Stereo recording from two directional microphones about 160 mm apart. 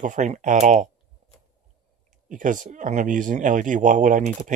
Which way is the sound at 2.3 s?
55° right (ahead or behind).